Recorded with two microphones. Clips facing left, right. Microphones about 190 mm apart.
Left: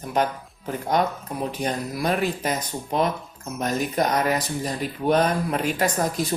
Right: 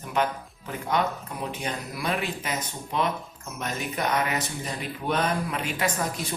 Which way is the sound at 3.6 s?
40° left (ahead or behind).